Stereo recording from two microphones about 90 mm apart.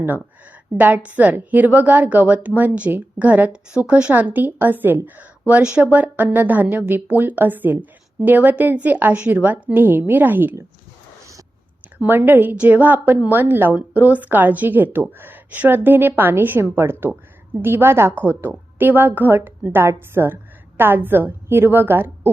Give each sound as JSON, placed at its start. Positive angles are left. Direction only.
{"t": 0.8, "sound": "a woman's voice", "side_deg": -20}
{"t": 12.0, "sound": "a woman's voice", "side_deg": -20}